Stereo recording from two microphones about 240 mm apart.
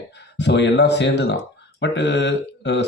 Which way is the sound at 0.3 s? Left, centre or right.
Left.